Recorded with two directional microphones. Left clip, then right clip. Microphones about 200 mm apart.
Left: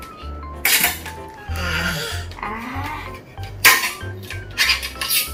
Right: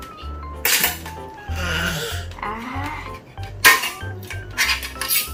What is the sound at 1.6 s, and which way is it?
Music, 20° right (ahead or behind).